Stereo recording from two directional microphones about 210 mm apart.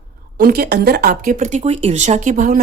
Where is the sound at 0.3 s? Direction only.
45° right (ahead or behind).